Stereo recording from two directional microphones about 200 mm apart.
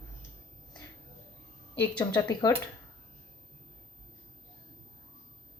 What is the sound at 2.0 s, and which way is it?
Speech, 20° left (ahead or behind).